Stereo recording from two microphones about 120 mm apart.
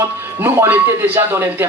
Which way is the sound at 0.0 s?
20° right (ahead or behind).